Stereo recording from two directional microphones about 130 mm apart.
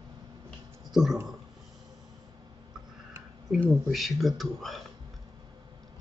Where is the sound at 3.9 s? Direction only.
Centre (ahead or behind).